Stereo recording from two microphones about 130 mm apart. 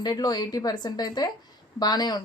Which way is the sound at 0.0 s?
30° left (ahead or behind).